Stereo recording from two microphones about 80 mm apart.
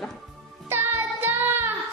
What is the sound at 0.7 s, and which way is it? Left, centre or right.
Music, right.